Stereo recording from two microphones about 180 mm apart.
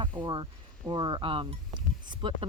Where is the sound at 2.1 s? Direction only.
25° right (ahead or behind).